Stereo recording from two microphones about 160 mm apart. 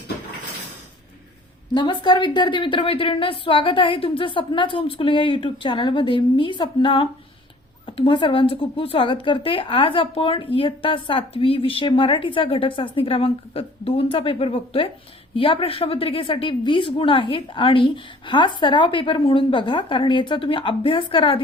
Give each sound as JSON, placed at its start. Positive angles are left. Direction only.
{"t": 1.7, "sound": "speech", "side_deg": 30}